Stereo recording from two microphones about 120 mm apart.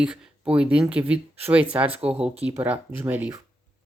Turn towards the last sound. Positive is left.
turn(degrees=-15)  # may be behind; listen again after turning